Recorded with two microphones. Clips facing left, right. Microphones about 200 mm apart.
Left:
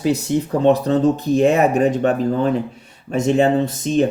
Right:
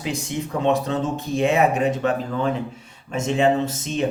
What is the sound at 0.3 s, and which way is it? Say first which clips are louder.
Speech: left 5 dB; 35° left (ahead or behind).